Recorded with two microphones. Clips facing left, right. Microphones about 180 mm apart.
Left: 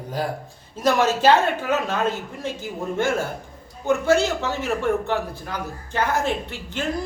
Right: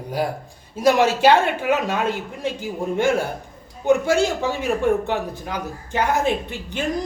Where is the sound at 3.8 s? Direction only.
15° right (ahead or behind).